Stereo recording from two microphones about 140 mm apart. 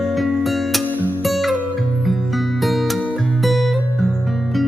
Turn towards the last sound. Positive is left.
turn(degrees=0)  # may be behind; listen again after turning